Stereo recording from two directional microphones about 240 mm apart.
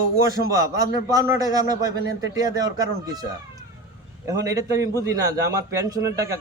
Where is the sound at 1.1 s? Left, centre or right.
Centre.